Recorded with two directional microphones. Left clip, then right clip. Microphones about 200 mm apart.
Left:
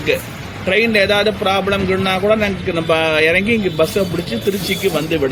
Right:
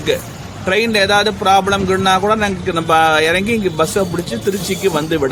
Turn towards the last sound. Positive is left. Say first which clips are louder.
# right 1 dB
turn(degrees=-15)  # may be behind; listen again after turning